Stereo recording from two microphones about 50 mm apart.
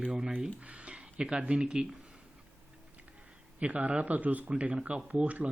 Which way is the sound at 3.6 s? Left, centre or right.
Right.